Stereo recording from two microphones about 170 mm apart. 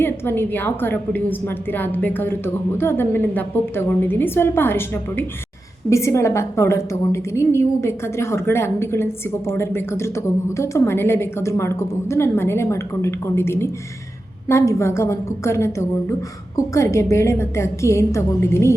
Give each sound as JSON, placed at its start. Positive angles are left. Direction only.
{"t": 0.0, "sound": "a woman's voice", "side_deg": 10}